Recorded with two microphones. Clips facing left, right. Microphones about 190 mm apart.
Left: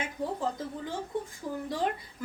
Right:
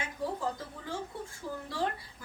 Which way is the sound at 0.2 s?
20° left (ahead or behind).